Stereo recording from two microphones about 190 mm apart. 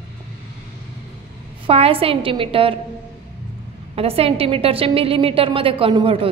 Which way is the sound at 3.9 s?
30° right (ahead or behind).